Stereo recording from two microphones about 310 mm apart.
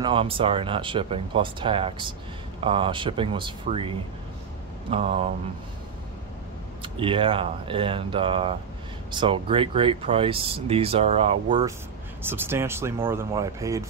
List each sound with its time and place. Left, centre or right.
0.0 s speech: centre
4.9 s speech: centre
6.8 s speech: centre